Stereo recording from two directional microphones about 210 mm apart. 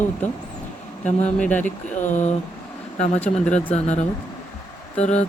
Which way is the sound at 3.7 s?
30° left (ahead or behind).